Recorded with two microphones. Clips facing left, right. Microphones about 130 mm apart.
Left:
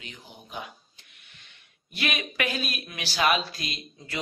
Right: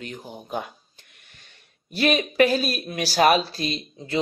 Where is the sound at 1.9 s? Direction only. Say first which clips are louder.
Right 10 dB; 35° right (ahead or behind).